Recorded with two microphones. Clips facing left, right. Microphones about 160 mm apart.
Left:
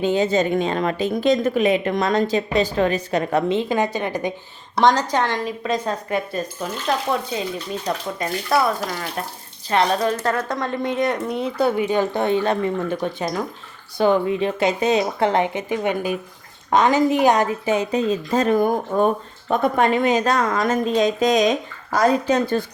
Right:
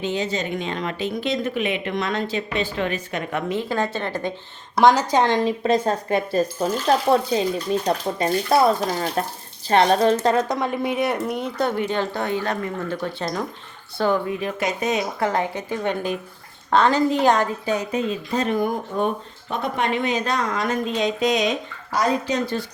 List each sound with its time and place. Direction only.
0.1 s speech: 50° left (ahead or behind)
3.5 s a woman's voice: 20° left (ahead or behind)
4.8 s speech: 5° right (ahead or behind)
5.1 s a woman's voice: 20° right (ahead or behind); by 17.8 s 20° left (ahead or behind)
17.9 s speech: 45° left (ahead or behind)